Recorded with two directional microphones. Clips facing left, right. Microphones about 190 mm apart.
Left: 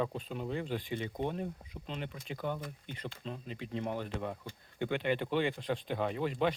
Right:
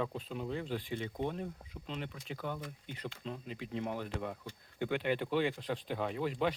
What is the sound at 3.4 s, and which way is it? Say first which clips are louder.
Speech: left 2 dB; 10° right (ahead or behind).